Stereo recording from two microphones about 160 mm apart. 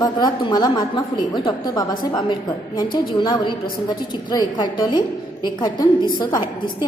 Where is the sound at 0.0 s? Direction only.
25° left (ahead or behind).